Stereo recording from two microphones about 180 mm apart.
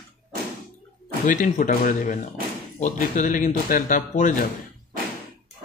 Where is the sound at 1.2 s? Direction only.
45° left (ahead or behind).